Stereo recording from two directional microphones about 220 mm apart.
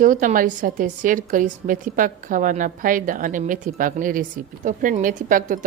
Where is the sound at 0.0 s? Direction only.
35° right (ahead or behind).